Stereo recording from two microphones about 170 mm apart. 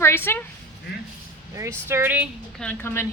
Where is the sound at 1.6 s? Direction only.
15° right (ahead or behind).